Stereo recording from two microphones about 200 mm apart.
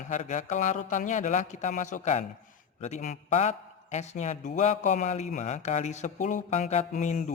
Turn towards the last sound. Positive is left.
turn(degrees=40)  # may be behind; listen again after turning